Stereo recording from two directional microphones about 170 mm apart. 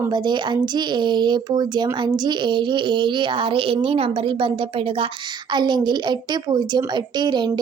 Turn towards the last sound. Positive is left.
turn(degrees=-25)  # may be behind; listen again after turning